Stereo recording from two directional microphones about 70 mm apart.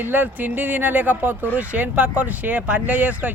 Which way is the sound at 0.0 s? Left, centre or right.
Right.